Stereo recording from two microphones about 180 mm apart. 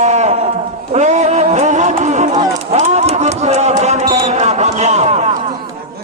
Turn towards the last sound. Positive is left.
turn(degrees=-40)  # may be behind; listen again after turning